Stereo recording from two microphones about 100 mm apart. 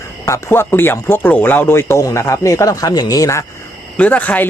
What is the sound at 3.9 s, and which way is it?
Speech, 15° left (ahead or behind).